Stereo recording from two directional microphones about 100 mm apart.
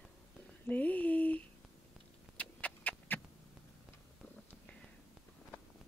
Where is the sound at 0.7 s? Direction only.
15° left (ahead or behind).